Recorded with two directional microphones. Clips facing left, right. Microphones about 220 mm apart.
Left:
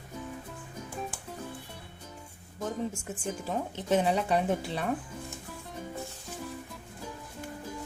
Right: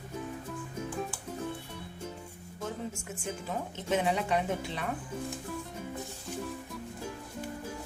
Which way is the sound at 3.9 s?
35° left (ahead or behind).